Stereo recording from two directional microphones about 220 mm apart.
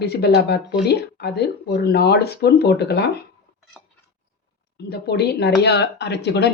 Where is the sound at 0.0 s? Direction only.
50° left (ahead or behind).